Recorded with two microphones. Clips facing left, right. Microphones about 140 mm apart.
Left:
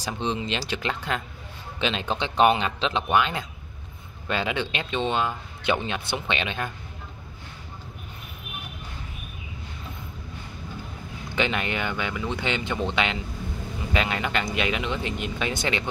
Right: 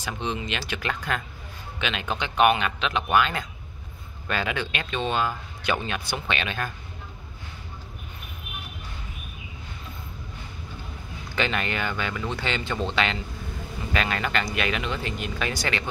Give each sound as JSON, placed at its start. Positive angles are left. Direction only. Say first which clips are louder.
{"t": 0.0, "sound": "speech", "louder": "left 2 dB", "side_deg": 30}
{"t": 11.3, "sound": "speech", "louder": "left 1 dB", "side_deg": 20}